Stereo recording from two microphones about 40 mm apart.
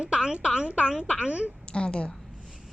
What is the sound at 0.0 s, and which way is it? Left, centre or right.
Speech, right.